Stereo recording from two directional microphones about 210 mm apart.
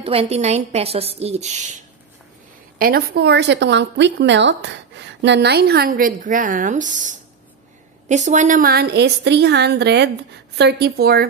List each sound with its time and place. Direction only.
0.0 s a woman's voice: 30° right (ahead or behind)
2.8 s speech: 50° right (ahead or behind)